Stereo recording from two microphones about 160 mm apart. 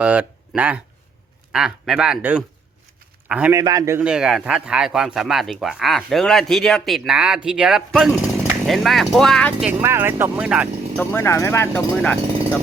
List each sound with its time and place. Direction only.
0.0 s a man's voice: 10° right (ahead or behind)
3.5 s a man's voice: 20° right (ahead or behind)
4.0 s speech: 5° right (ahead or behind)
9.6 s speech: 15° right (ahead or behind)
10.9 s speech: 15° left (ahead or behind)